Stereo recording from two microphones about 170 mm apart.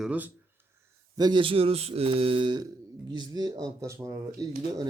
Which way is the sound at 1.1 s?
25° right (ahead or behind).